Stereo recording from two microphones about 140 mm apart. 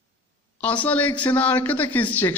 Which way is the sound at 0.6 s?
10° left (ahead or behind).